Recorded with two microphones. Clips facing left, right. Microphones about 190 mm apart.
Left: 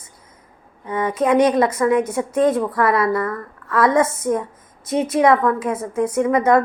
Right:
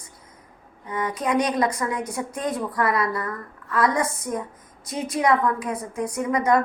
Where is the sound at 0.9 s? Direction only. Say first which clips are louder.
Left 7 dB; 25° left (ahead or behind).